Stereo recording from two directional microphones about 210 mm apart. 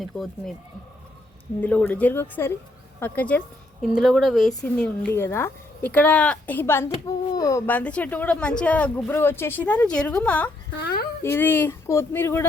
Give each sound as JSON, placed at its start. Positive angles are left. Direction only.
{"t": 0.0, "sound": "speech", "side_deg": 0}
{"t": 1.6, "sound": "speech", "side_deg": 5}
{"t": 10.8, "sound": "speech", "side_deg": 50}
{"t": 11.2, "sound": "speech", "side_deg": 10}